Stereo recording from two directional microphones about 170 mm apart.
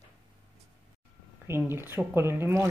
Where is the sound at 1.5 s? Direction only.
15° right (ahead or behind).